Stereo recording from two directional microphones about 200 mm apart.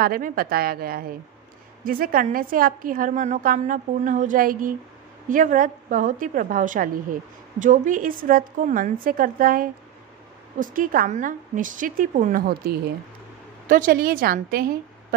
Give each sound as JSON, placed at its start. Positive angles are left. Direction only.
{"t": 0.0, "sound": "a woman's voice", "side_deg": -45}